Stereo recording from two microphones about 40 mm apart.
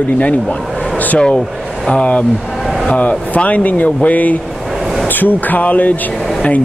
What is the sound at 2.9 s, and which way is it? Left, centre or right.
Speech, left.